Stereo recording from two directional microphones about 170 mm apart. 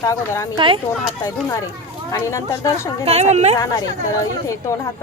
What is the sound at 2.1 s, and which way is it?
Speech, 15° left (ahead or behind).